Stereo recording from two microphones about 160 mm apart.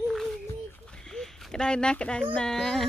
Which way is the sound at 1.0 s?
Centre (ahead or behind).